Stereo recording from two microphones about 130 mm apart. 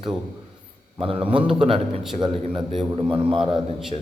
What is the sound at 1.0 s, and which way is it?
Speech, 45° right (ahead or behind).